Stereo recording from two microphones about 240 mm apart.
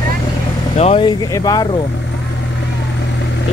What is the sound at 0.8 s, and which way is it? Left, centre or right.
Speech, left.